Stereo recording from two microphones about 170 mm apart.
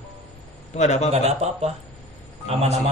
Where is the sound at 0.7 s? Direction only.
40° left (ahead or behind).